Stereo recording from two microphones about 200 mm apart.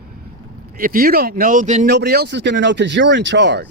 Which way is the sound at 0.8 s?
45° right (ahead or behind).